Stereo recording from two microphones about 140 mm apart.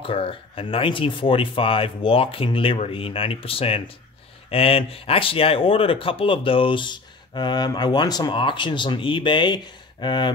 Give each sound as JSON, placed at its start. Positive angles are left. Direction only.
{"t": 0.0, "sound": "speech", "side_deg": 40}